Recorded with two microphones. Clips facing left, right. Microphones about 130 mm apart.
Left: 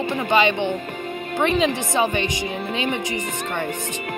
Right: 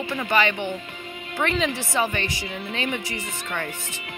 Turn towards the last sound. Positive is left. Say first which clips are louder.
# left 5 dB
turn(degrees=20)  # may be behind; listen again after turning